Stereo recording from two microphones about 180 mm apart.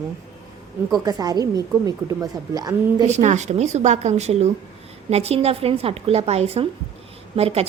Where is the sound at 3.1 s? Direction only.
40° right (ahead or behind).